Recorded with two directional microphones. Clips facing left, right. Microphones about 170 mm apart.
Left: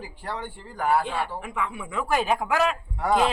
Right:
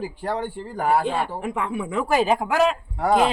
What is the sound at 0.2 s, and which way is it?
Speech, 40° right (ahead or behind).